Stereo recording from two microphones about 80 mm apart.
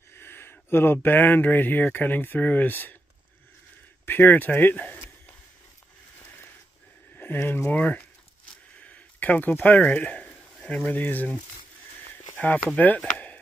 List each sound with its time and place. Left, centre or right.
0.1 s speech: left
4.0 s speech: left
7.2 s speech: left
12.1 s a sound: left
12.6 s speech: centre